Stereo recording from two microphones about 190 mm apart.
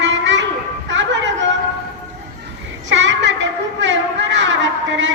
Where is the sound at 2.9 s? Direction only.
75° right (ahead or behind).